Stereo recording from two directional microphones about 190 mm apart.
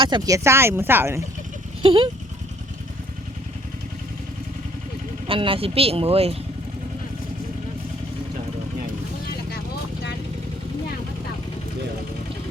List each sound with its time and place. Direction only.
0.0 s speech: 20° right (ahead or behind)
1.8 s speech: 25° right (ahead or behind)
5.3 s speech: 30° right (ahead or behind)